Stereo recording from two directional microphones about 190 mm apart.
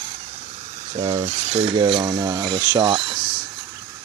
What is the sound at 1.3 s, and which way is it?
Speech, 30° right (ahead or behind).